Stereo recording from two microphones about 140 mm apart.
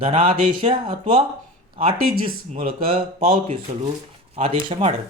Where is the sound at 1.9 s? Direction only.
90° right.